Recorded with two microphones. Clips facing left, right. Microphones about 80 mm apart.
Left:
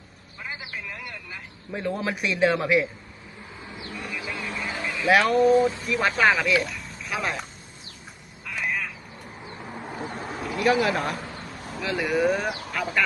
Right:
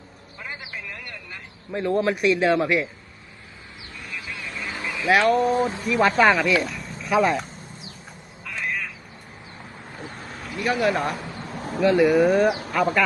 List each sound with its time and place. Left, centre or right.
0.4 s a sound: centre
3.9 s vehicle: centre
4.8 s a sound: centre
5.0 s speech: centre
8.4 s frog: centre
10.3 s speech: centre